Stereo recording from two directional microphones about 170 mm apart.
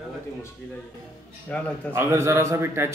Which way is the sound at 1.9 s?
15° right (ahead or behind).